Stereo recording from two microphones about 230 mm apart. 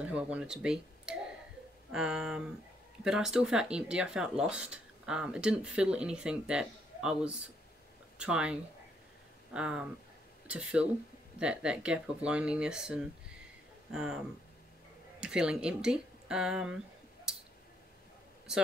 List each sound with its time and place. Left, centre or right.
0.0 s speech: centre